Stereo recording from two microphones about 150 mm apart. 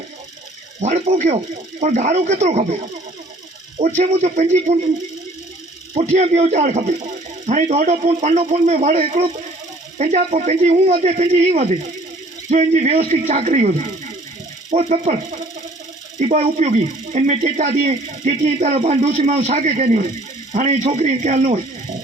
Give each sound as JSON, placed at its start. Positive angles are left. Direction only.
{"t": 0.8, "sound": "speech", "side_deg": -50}
{"t": 3.8, "sound": "speech", "side_deg": -50}
{"t": 5.9, "sound": "speech", "side_deg": -45}